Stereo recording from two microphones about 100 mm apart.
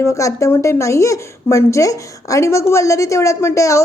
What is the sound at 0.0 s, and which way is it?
Speech, 30° left (ahead or behind).